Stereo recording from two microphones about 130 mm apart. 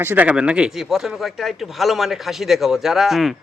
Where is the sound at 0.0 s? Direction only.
15° right (ahead or behind).